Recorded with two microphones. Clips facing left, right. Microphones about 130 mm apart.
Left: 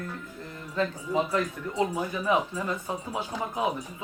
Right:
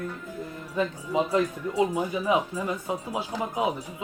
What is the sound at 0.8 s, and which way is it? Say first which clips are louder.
Speech: right 1 dB; 20° right (ahead or behind).